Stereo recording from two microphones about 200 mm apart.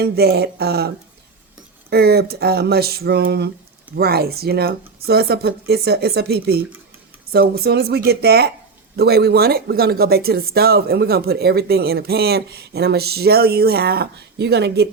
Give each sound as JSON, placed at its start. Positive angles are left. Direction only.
{"t": 0.0, "sound": "speech", "side_deg": -55}
{"t": 1.9, "sound": "speech", "side_deg": -50}